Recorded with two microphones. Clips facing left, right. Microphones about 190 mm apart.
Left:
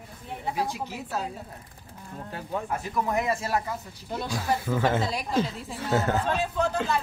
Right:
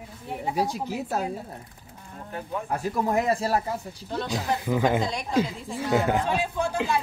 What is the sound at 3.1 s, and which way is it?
Speech, 35° right (ahead or behind).